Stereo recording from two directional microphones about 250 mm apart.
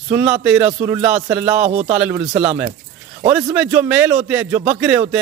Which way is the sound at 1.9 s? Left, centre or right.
Centre.